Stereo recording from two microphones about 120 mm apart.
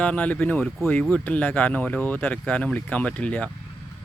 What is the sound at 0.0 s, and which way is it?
Speech, 10° left (ahead or behind).